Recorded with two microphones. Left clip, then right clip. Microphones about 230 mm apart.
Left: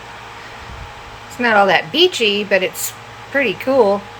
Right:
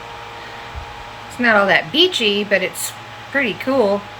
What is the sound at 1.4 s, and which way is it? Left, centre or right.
A woman's voice, centre.